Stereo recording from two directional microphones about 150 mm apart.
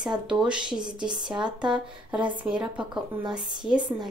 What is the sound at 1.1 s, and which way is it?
Speech, 30° right (ahead or behind).